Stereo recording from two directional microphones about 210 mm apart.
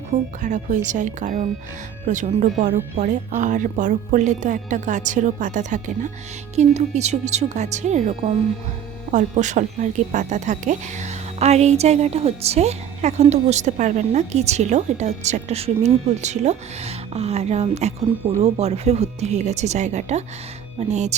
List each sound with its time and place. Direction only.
0.1 s speech: 35° right (ahead or behind)